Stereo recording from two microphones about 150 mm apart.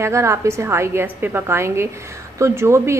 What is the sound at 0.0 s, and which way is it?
A woman's voice, 20° right (ahead or behind).